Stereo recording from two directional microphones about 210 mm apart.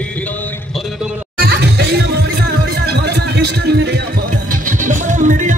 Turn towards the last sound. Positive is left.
turn(degrees=-35)  # may be behind; listen again after turning